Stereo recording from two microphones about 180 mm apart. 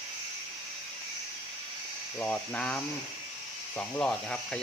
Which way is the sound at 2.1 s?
5° left (ahead or behind).